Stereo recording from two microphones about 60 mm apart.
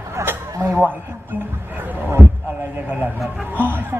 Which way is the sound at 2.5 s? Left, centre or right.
Right.